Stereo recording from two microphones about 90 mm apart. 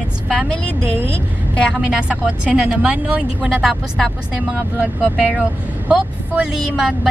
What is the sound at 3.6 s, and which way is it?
Speech, centre (ahead or behind).